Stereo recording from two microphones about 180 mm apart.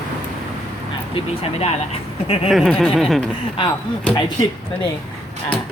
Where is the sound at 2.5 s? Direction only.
Centre (ahead or behind).